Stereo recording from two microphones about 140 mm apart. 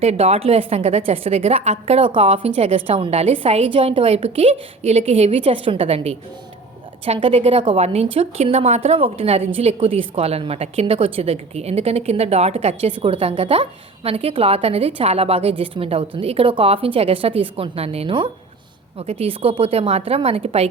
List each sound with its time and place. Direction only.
0.0 s a woman's voice: 50° right (ahead or behind)